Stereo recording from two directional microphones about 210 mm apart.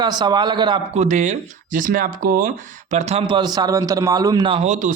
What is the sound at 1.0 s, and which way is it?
A man's voice, 35° right (ahead or behind).